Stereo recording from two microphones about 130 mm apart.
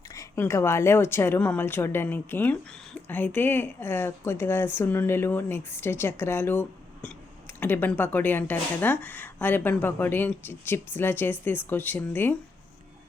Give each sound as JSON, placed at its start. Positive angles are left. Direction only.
{"t": 0.1, "sound": "a woman's voice", "side_deg": 25}